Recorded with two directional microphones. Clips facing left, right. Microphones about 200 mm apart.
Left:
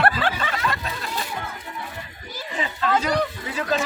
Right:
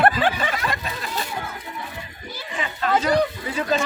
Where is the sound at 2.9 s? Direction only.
10° right (ahead or behind).